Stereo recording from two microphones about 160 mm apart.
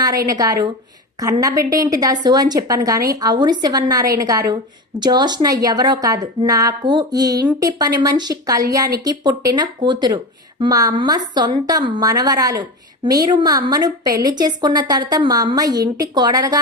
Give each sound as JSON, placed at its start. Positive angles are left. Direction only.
{"t": 0.3, "sound": "a woman's voice", "side_deg": -20}